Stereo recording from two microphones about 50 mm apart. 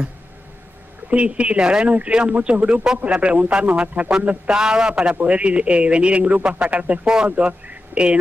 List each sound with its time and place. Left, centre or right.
1.1 s a man's voice: right
4.5 s a man's voice: centre